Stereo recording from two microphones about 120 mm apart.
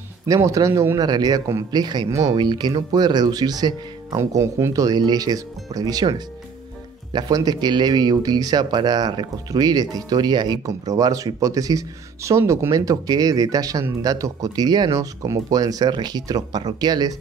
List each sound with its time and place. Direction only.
0.3 s a man's voice: 30° right (ahead or behind)
2.3 s speech: 40° right (ahead or behind)